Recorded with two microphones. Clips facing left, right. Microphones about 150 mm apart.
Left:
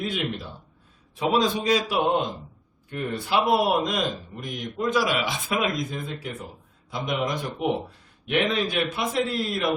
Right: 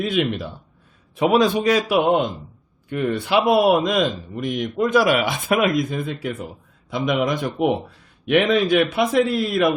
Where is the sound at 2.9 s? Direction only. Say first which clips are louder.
Right 6 dB; 80° right.